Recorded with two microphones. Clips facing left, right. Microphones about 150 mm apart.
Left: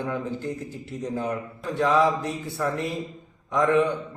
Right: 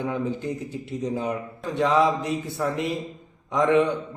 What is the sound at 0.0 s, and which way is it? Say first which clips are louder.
A man's voice: right 2 dB; 15° right (ahead or behind).